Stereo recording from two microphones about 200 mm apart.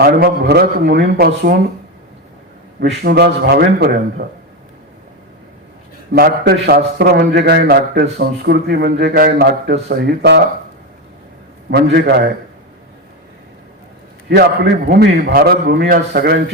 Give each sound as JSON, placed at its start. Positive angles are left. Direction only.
{"t": 0.0, "sound": "a man's voice", "side_deg": -50}
{"t": 2.8, "sound": "a man's voice", "side_deg": -55}
{"t": 6.1, "sound": "a man's voice", "side_deg": -50}
{"t": 11.7, "sound": "a man's voice", "side_deg": -55}
{"t": 14.3, "sound": "a man's voice", "side_deg": -55}